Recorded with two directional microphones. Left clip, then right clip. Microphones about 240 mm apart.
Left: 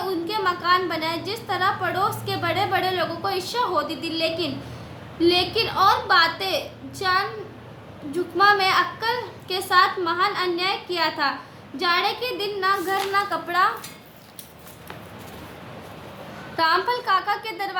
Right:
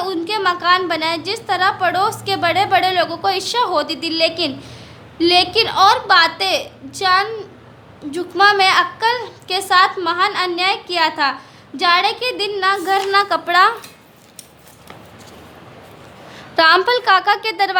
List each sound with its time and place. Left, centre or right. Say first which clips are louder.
0.0 s a woman's voice: right 5 dB; right
16.6 s a woman's voice: right 9 dB; right